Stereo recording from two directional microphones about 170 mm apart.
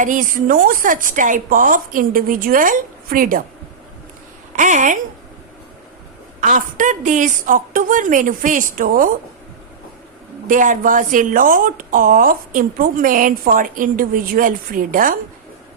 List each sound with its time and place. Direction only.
0.0 s speech: 50° right (ahead or behind)
4.5 s speech: 50° right (ahead or behind)
6.4 s speech: 50° right (ahead or behind)
10.4 s speech: 50° right (ahead or behind)